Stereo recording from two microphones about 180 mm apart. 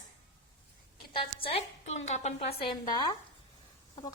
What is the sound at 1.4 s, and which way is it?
A woman's voice, 35° left (ahead or behind).